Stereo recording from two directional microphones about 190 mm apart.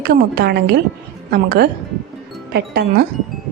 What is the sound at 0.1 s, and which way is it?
A woman's voice, 55° right (ahead or behind).